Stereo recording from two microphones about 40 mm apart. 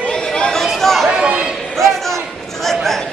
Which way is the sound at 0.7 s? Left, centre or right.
Centre.